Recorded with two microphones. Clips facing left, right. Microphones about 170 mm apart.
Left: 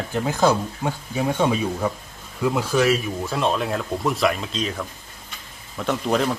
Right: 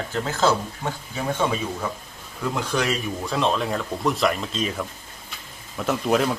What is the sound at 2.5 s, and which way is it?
Speech, 5° left (ahead or behind).